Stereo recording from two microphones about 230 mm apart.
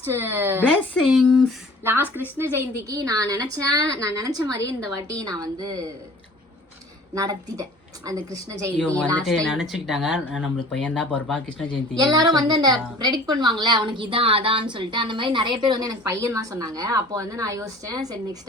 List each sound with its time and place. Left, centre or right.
0.0 s a woman's voice: centre
0.9 s speech: centre
1.8 s a woman's voice: centre
7.1 s a woman's voice: centre
9.1 s speech: centre
12.1 s a woman's voice: centre